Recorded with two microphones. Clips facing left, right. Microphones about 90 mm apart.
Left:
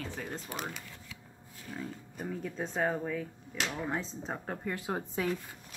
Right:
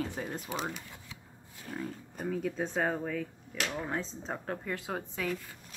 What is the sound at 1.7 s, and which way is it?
Speech, 50° right (ahead or behind).